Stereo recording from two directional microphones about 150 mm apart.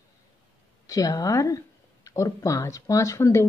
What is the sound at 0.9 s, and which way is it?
Speech, 25° left (ahead or behind).